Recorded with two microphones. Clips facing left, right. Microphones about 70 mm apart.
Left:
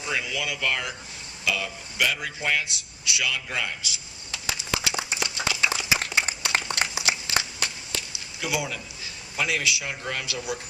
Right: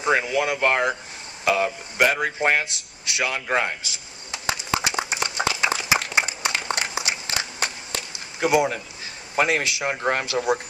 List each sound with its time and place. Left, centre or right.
0.0 s a man's voice: right
4.3 s a sound: right
9.3 s a man's voice: right